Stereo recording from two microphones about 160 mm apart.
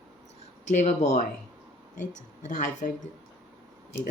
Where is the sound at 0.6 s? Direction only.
45° left (ahead or behind).